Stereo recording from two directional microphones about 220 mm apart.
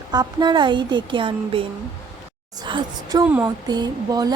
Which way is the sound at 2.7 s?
20° right (ahead or behind).